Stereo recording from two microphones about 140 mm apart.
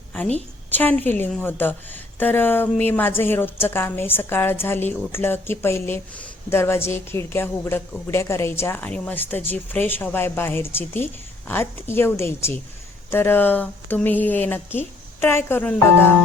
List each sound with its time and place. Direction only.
0.3 s speech: 10° left (ahead or behind)